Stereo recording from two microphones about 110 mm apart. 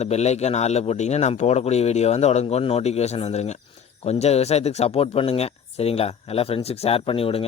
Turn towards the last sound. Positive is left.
turn(degrees=55)  # may be behind; listen again after turning